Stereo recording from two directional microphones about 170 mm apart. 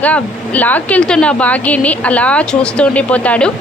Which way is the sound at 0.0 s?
10° left (ahead or behind).